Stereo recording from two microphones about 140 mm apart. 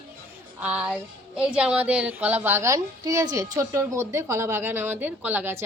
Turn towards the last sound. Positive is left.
turn(degrees=-15)  # may be behind; listen again after turning